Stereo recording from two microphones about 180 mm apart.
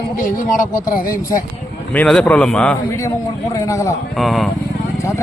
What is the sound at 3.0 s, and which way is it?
A man's voice, 20° left (ahead or behind).